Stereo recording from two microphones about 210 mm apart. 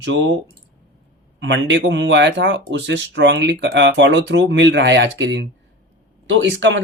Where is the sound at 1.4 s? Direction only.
60° right (ahead or behind).